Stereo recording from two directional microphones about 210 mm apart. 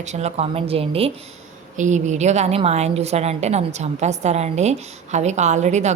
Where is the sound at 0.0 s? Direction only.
30° right (ahead or behind).